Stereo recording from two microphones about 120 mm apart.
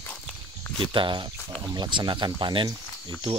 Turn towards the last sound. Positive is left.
turn(degrees=-35)  # may be behind; listen again after turning